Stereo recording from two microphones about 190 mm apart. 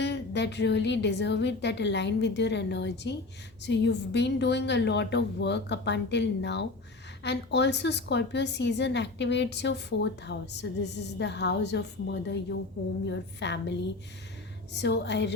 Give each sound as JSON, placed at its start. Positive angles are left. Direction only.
{"t": 0.0, "sound": "a woman's voice", "side_deg": 65}